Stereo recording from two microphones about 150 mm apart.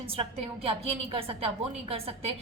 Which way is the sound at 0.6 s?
40° right (ahead or behind).